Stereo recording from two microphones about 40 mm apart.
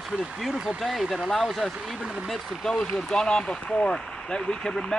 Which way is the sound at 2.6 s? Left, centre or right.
Left.